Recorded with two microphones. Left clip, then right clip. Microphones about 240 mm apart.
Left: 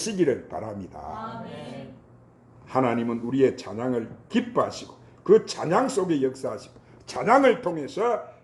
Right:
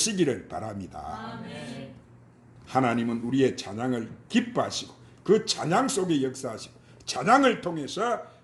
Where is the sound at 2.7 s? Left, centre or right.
Right.